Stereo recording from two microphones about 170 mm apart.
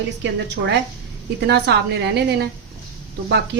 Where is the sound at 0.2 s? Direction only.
90° right.